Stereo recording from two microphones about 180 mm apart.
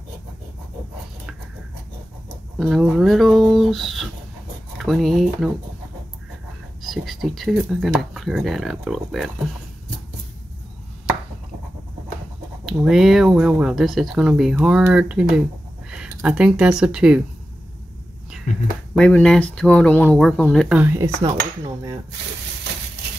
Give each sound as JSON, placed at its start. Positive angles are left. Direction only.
{"t": 2.6, "sound": "speech", "side_deg": 0}
{"t": 6.9, "sound": "speech", "side_deg": 0}
{"t": 12.6, "sound": "speech", "side_deg": 0}
{"t": 18.9, "sound": "speech", "side_deg": 5}
{"t": 20.7, "sound": "speech", "side_deg": -15}